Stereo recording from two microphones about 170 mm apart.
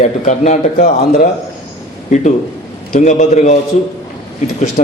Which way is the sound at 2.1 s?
45° left (ahead or behind).